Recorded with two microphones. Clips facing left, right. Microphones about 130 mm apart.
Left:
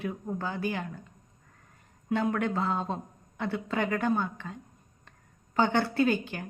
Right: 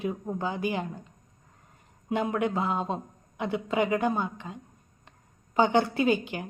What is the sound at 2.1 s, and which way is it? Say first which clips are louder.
Speech: right 1 dB; 15° right (ahead or behind).